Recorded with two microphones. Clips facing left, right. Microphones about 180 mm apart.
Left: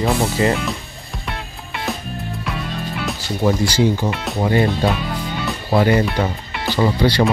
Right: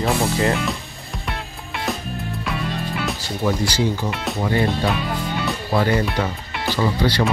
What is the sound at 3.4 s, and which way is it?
Speech, 35° left (ahead or behind).